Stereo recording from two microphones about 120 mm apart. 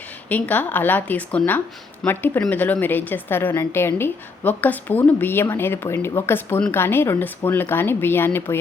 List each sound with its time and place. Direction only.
0.3 s a woman's voice: 15° left (ahead or behind)